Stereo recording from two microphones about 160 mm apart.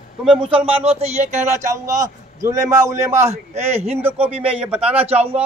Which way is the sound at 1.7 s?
20° right (ahead or behind).